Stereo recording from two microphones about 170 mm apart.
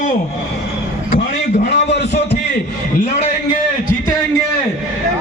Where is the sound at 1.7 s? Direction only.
90° left.